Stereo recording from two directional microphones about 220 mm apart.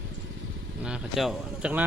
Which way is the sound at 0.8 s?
Centre (ahead or behind).